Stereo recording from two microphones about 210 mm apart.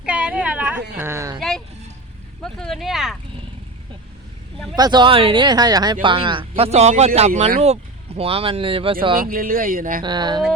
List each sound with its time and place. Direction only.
0.0 s a sound: 5° right (ahead or behind)
0.9 s speech: 10° right (ahead or behind)
1.4 s speech: centre (ahead or behind)
4.8 s speech: 20° right (ahead or behind)
9.2 s speech: 45° right (ahead or behind)
10.0 s speech: 20° right (ahead or behind)